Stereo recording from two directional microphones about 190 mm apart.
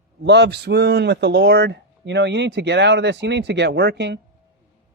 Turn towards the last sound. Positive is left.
turn(degrees=-65)  # may be behind; listen again after turning